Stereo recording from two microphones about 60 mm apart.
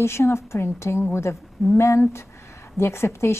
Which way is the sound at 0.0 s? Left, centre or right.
Left.